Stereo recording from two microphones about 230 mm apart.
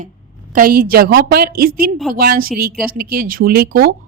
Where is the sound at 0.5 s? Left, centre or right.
Right.